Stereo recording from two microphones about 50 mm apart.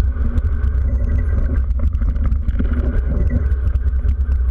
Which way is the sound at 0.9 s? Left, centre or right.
Centre.